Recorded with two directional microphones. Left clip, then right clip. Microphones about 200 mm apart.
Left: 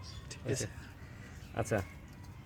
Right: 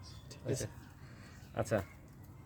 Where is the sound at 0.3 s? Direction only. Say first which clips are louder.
Left 2 dB; 5° right (ahead or behind).